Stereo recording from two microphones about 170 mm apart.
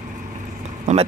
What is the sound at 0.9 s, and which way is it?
Speech, 45° right (ahead or behind).